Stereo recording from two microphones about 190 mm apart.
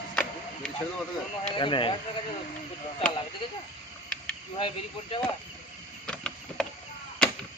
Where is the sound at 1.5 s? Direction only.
25° left (ahead or behind).